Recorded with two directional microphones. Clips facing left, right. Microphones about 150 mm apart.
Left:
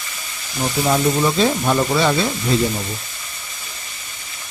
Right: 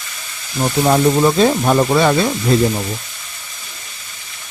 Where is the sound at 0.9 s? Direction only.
50° right (ahead or behind).